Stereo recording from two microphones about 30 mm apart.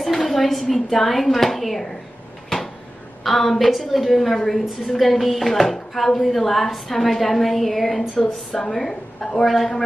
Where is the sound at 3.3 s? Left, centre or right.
Centre.